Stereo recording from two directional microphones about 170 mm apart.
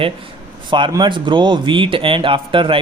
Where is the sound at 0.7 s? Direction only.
25° right (ahead or behind).